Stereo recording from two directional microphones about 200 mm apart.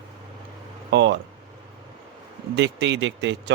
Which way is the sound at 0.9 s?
60° right (ahead or behind).